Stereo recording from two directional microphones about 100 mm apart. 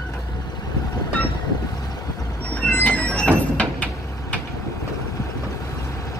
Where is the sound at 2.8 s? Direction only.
15° left (ahead or behind).